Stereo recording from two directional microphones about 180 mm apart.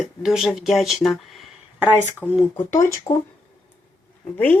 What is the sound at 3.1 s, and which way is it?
Speech, 25° left (ahead or behind).